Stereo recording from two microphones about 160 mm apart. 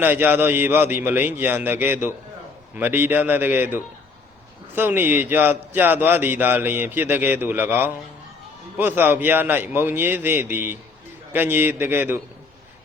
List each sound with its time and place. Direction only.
0.0 s a man's voice: 10° right (ahead or behind)